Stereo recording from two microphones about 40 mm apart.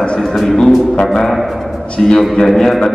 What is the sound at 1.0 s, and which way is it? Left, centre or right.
Speech, centre.